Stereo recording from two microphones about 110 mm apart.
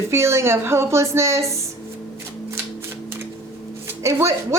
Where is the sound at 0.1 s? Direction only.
25° right (ahead or behind).